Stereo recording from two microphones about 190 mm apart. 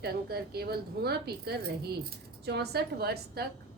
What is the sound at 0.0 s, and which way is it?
A woman's voice, 55° right (ahead or behind).